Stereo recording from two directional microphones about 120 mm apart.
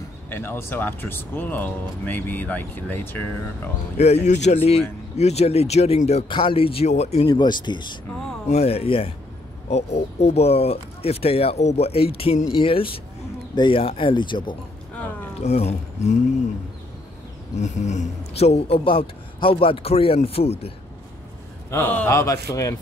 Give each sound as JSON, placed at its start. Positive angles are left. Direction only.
{"t": 0.3, "sound": "speech", "side_deg": 20}
{"t": 4.0, "sound": "speech", "side_deg": 70}
{"t": 6.2, "sound": "speech", "side_deg": 45}
{"t": 6.9, "sound": "speech", "side_deg": 65}
{"t": 7.2, "sound": "speech", "side_deg": 40}
{"t": 8.5, "sound": "speech", "side_deg": 60}
{"t": 9.7, "sound": "speech", "side_deg": 65}
{"t": 15.4, "sound": "speech", "side_deg": 65}
{"t": 17.6, "sound": "speech", "side_deg": 75}
{"t": 21.6, "sound": "a man's voice", "side_deg": 15}